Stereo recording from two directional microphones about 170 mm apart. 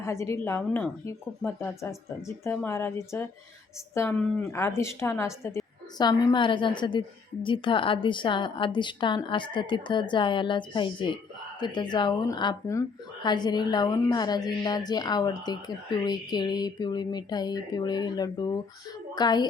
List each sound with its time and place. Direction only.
0.0 s a woman's voice: 15° left (ahead or behind)